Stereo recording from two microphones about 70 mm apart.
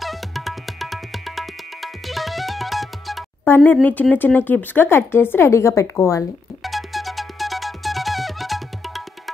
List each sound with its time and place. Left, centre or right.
0.0 s music: centre
3.4 s a woman's voice: left
6.6 s music: centre